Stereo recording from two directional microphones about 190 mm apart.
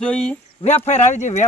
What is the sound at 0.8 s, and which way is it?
Speech, 35° left (ahead or behind).